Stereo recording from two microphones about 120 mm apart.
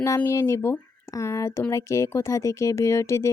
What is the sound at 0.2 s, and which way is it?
Speech, 25° left (ahead or behind).